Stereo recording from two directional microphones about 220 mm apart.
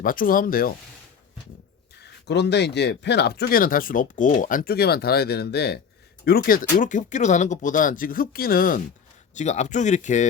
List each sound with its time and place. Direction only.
0.0 s speech: 40° left (ahead or behind)
2.0 s speech: 50° left (ahead or behind); by 10.2 s 35° left (ahead or behind)